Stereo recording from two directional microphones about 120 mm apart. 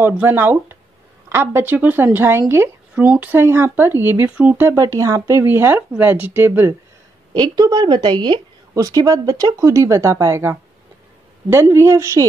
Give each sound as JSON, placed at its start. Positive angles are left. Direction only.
{"t": 0.0, "sound": "a woman's voice", "side_deg": -15}
{"t": 7.3, "sound": "a woman's voice", "side_deg": -35}
{"t": 8.7, "sound": "speech", "side_deg": -30}